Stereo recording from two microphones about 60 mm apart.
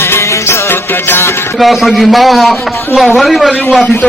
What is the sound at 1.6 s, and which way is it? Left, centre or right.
A man's voice, centre.